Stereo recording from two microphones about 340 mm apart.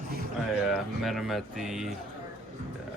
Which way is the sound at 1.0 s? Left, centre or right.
Centre.